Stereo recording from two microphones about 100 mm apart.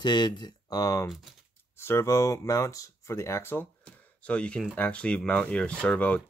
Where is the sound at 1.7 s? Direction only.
25° left (ahead or behind).